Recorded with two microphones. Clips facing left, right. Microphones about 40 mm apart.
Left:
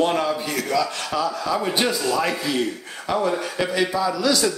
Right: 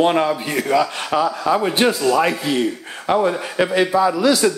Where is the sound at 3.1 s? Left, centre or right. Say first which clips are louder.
Right 4 dB; right.